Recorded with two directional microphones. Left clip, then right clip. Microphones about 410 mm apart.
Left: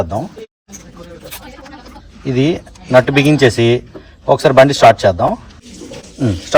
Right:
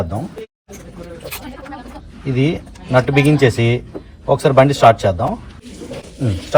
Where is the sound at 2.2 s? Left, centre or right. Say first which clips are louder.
Left 4 dB; left.